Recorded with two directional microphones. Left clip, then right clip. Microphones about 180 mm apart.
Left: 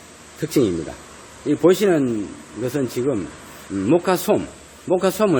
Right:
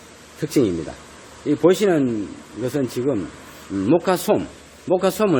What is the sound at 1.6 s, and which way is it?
Speech, centre (ahead or behind).